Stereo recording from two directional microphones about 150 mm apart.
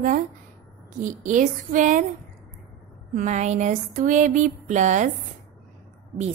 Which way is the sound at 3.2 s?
50° right (ahead or behind).